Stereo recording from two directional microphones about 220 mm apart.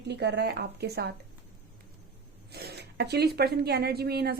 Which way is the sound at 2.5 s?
45° right (ahead or behind).